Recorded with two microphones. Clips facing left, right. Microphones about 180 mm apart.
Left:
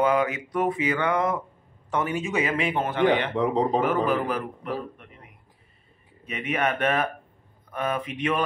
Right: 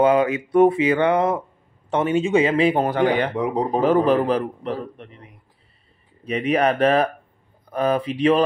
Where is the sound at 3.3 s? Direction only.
10° right (ahead or behind).